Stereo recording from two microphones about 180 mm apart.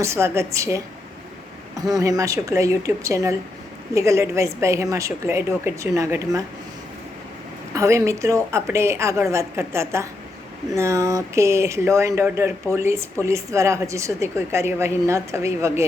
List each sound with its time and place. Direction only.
0.0 s speech: 15° right (ahead or behind)
1.8 s speech: 20° right (ahead or behind)
7.7 s speech: 15° right (ahead or behind)